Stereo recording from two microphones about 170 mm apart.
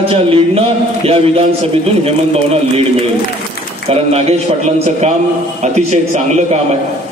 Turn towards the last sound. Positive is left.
turn(degrees=-40)  # may be behind; listen again after turning